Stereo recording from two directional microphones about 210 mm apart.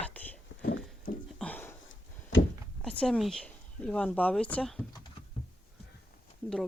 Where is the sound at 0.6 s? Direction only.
45° left (ahead or behind).